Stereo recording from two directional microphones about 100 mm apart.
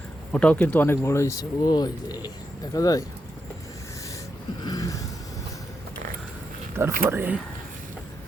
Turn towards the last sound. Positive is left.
turn(degrees=-20)  # may be behind; listen again after turning